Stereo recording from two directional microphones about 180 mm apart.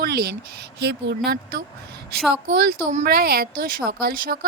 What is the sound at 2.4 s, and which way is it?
A woman's voice, 60° right (ahead or behind).